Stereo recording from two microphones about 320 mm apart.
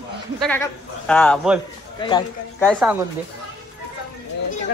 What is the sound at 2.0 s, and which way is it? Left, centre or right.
Speech, centre.